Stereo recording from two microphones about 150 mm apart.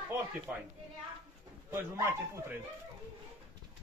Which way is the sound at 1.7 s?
15° right (ahead or behind).